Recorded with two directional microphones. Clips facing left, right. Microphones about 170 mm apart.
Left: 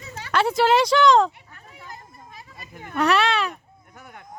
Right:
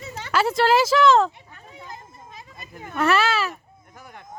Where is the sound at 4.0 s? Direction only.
Centre (ahead or behind).